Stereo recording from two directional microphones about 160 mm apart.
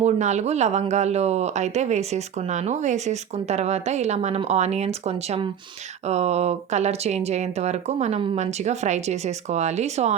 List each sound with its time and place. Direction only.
0.0 s speech: 45° right (ahead or behind)